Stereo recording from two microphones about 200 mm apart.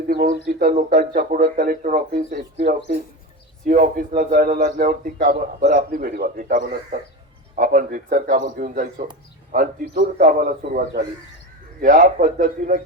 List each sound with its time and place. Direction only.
0.3 s a man's voice: 45° right (ahead or behind)